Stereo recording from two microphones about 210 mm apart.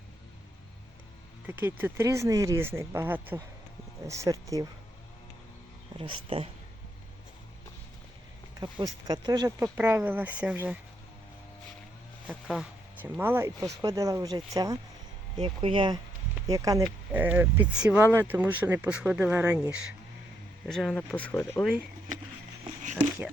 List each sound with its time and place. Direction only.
1.5 s speech: 10° right (ahead or behind)
6.0 s speech: 25° right (ahead or behind)
8.6 s speech: 20° right (ahead or behind)
12.3 s speech: 5° right (ahead or behind)
20.7 s speech: 5° left (ahead or behind)